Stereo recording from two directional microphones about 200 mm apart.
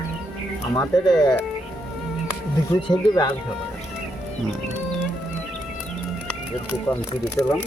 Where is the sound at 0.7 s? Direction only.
20° left (ahead or behind).